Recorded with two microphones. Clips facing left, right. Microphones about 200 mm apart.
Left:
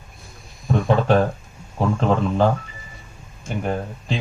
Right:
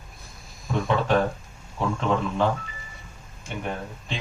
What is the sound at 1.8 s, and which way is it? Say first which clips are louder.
Speech: left 5 dB; 40° left (ahead or behind).